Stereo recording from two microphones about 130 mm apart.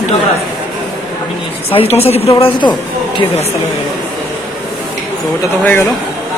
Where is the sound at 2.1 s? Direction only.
50° left (ahead or behind).